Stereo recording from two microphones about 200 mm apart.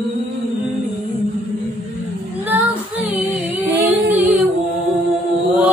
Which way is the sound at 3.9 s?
10° right (ahead or behind).